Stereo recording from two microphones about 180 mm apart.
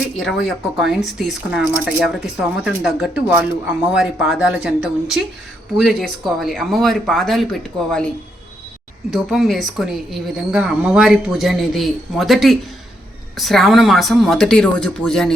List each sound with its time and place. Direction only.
0.2 s a woman's voice: centre (ahead or behind)